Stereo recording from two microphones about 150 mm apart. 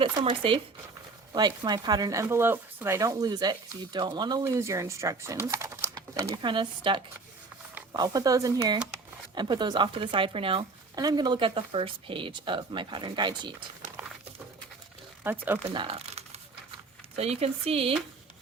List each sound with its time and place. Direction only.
0.0 s speech: 35° right (ahead or behind)
10.9 s speech: 25° right (ahead or behind)
15.2 s speech: 15° right (ahead or behind)
15.6 s crumpling: 35° right (ahead or behind)
17.2 s speech: 45° right (ahead or behind)